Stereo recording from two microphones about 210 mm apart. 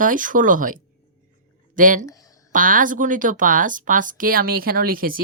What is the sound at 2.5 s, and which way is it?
Speech, 40° right (ahead or behind).